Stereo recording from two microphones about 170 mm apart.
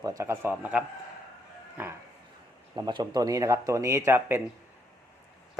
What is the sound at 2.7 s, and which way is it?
Speech, 25° right (ahead or behind).